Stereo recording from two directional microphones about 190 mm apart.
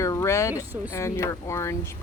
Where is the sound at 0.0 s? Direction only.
15° left (ahead or behind).